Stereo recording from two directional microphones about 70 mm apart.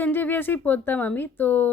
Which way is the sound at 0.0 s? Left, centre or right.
Left.